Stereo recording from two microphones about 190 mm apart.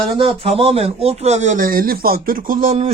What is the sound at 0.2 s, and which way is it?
Speech, 30° right (ahead or behind).